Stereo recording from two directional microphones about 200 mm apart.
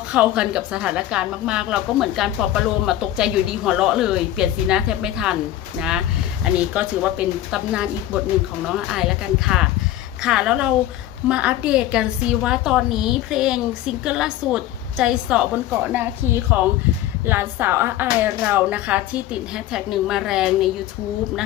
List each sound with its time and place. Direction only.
0.1 s a woman's voice: 5° right (ahead or behind)
6.4 s a woman's voice: 5° right (ahead or behind)